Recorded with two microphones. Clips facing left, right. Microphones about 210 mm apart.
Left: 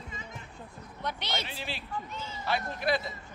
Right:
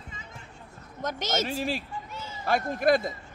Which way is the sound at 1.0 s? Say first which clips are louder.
Right 6 dB; 45° right (ahead or behind).